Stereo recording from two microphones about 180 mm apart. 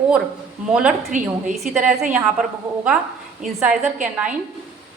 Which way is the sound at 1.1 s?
40° right (ahead or behind).